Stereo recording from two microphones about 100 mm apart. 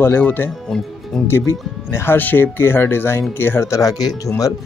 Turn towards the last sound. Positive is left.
turn(degrees=40)  # may be behind; listen again after turning